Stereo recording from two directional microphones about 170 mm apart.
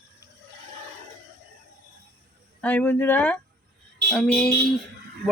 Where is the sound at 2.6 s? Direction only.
10° left (ahead or behind).